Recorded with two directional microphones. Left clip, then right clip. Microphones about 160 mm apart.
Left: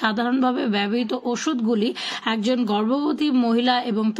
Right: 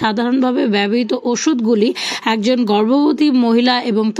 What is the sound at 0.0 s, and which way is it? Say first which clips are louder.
Speech: right 5 dB; 35° right (ahead or behind).